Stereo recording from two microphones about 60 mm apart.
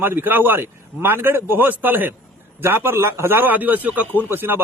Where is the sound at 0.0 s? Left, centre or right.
Right.